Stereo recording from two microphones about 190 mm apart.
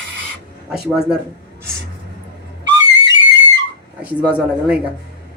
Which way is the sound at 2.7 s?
75° right (ahead or behind).